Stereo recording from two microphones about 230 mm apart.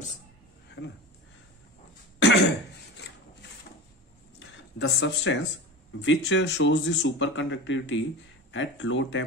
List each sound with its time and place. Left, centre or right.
0.8 s speech: left
2.1 s cough: left
4.4 s a sound: left
6.0 s speech: left